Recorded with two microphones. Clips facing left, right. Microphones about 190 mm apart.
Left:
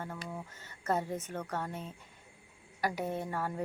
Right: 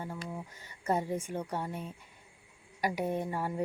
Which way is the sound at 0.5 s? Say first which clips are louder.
Right 1 dB; 15° right (ahead or behind).